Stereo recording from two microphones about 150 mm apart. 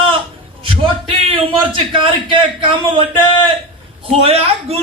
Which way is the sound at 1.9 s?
35° right (ahead or behind).